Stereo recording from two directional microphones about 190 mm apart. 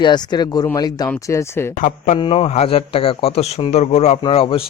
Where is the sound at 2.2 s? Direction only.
30° left (ahead or behind).